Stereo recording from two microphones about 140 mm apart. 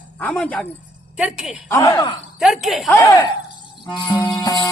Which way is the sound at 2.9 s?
20° left (ahead or behind).